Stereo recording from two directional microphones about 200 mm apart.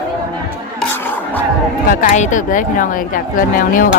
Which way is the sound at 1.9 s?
40° left (ahead or behind).